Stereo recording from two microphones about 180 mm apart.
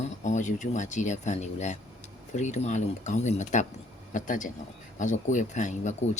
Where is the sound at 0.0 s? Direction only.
40° left (ahead or behind).